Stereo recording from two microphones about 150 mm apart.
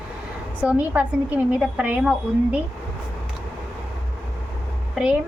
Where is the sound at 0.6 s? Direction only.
10° right (ahead or behind).